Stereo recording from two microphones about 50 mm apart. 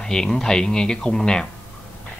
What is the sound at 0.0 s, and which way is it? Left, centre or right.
Speech, centre.